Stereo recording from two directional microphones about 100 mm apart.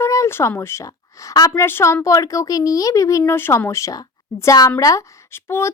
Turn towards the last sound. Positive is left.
turn(degrees=25)  # may be behind; listen again after turning